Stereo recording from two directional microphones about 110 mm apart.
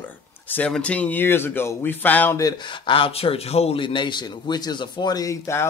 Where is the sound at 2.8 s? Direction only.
55° left (ahead or behind).